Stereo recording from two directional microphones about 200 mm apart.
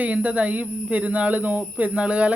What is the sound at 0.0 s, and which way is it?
A woman's voice, 5° right (ahead or behind).